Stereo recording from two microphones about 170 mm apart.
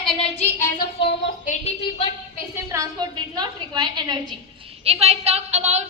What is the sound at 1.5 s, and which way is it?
Speech, 40° left (ahead or behind).